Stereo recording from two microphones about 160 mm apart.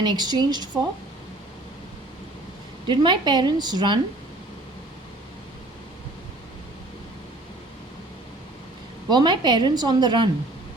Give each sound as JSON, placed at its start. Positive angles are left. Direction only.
{"t": 0.0, "sound": "a woman's voice", "side_deg": -25}
{"t": 2.8, "sound": "a woman's voice", "side_deg": -30}
{"t": 9.0, "sound": "a woman's voice", "side_deg": -30}